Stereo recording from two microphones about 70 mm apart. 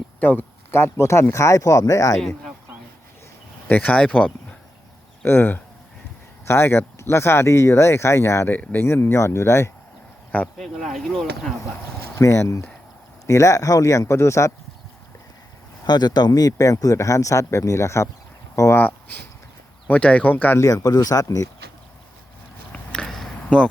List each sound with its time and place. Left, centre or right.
0.2 s speech: left
0.7 s speech: left
2.1 s speech: centre
3.7 s speech: left
5.2 s speech: left
8.4 s speech: left
10.6 s speech: centre
12.1 s speech: left
15.9 s speech: left
18.8 s speech: left
20.6 s speech: left
22.7 s a sound: centre
23.5 s speech: centre